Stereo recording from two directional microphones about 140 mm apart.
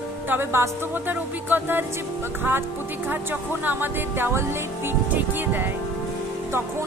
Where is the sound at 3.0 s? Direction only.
15° right (ahead or behind).